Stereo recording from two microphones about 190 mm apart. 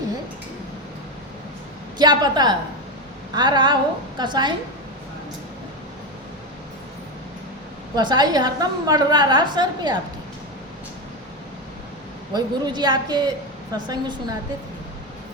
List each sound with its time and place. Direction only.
2.0 s a woman's voice: 20° right (ahead or behind)
7.9 s a woman's voice: 20° right (ahead or behind)
12.3 s a woman's voice: 20° right (ahead or behind)